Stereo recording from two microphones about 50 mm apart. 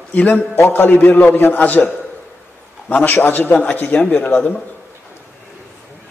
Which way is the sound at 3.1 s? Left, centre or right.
Left.